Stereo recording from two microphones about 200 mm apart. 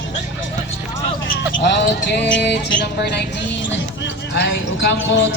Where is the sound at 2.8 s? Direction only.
55° left (ahead or behind).